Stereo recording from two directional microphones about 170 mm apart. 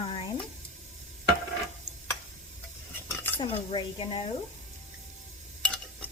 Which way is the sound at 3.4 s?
30° left (ahead or behind).